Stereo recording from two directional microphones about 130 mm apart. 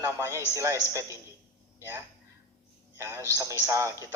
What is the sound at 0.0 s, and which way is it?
A man's voice, 20° right (ahead or behind).